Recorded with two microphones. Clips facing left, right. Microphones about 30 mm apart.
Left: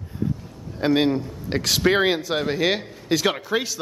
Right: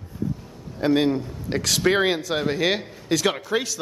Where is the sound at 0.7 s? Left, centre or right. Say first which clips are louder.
Even; centre.